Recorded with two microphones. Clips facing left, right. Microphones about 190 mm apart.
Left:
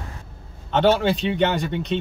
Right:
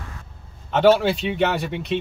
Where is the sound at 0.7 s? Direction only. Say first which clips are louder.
Right 2 dB; 5° right (ahead or behind).